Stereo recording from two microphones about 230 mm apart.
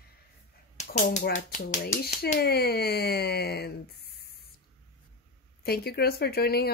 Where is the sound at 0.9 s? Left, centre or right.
Left.